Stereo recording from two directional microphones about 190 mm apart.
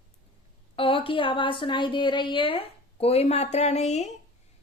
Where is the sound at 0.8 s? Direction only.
25° left (ahead or behind).